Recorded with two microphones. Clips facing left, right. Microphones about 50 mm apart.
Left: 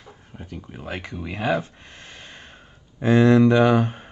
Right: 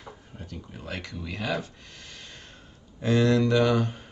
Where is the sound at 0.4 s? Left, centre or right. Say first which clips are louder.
Left 6 dB; left.